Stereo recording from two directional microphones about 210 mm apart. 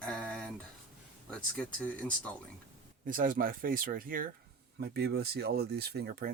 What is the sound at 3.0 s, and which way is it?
Speech, 40° right (ahead or behind).